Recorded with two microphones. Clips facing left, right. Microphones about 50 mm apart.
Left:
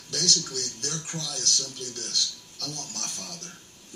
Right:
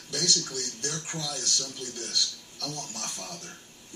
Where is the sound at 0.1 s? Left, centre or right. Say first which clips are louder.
Left 1 dB; centre.